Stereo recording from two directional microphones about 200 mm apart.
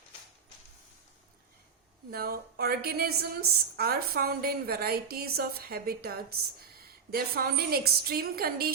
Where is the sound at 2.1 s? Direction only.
50° right (ahead or behind).